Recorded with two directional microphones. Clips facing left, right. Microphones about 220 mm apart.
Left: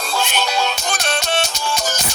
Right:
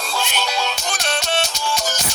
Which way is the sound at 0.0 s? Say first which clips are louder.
Left 3 dB; 55° left (ahead or behind).